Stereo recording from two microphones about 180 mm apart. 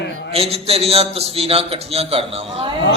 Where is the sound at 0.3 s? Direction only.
35° right (ahead or behind).